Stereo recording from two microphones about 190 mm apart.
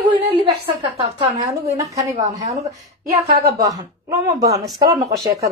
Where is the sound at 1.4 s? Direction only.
15° right (ahead or behind).